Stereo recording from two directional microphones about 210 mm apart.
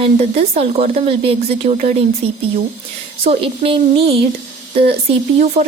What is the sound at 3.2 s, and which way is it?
Speech, 25° right (ahead or behind).